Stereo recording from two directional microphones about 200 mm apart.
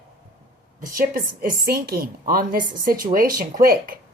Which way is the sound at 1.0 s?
45° right (ahead or behind).